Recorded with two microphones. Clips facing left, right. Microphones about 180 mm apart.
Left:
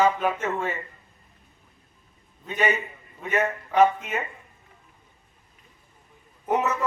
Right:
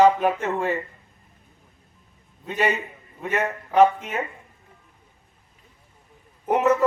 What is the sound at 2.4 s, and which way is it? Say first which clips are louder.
Speech: right 2 dB; 35° right (ahead or behind).